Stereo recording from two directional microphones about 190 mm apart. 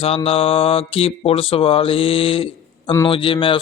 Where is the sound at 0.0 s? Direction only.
30° left (ahead or behind).